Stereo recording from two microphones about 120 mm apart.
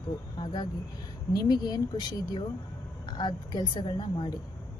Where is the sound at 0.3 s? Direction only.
40° left (ahead or behind).